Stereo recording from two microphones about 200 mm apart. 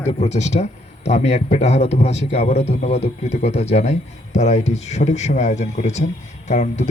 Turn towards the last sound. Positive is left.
turn(degrees=35)  # may be behind; listen again after turning